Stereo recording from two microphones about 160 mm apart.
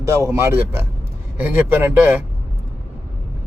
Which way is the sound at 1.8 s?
10° right (ahead or behind).